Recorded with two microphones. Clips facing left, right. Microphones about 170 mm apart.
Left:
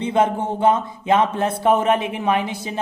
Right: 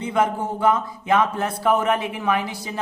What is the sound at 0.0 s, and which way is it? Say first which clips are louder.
Speech: left 3 dB; 25° left (ahead or behind).